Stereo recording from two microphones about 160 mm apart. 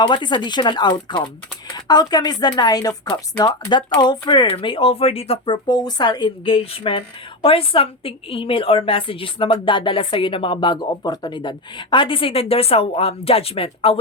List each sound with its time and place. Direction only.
0.0 s speech: 30° left (ahead or behind)
5.6 s a woman's voice: 25° left (ahead or behind)